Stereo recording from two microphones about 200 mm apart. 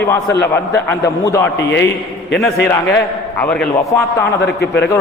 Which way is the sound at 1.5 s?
60° left (ahead or behind).